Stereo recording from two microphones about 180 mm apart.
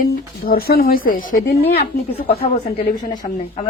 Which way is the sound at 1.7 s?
35° left (ahead or behind).